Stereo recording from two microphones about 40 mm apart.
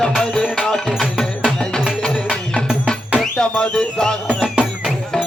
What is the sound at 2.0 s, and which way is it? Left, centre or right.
Music, centre.